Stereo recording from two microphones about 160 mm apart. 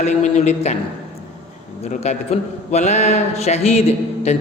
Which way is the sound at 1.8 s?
45° left (ahead or behind).